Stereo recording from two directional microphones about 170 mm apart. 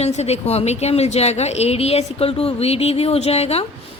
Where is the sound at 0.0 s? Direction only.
40° left (ahead or behind).